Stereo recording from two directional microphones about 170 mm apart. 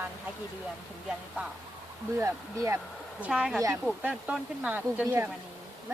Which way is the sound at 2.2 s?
15° right (ahead or behind).